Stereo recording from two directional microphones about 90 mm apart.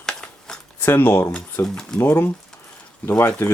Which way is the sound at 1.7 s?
5° left (ahead or behind).